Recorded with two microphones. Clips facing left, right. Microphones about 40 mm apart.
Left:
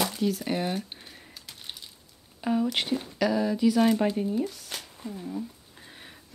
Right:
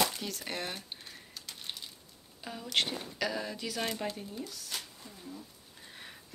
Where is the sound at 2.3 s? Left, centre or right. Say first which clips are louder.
Left 17 dB; left.